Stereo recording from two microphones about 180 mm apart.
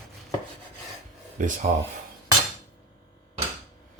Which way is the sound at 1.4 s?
45° right (ahead or behind).